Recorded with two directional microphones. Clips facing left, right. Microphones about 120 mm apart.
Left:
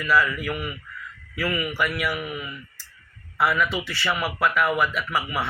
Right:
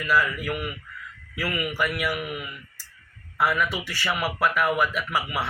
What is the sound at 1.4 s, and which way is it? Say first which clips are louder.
Speech: left 2 dB; 10° right (ahead or behind).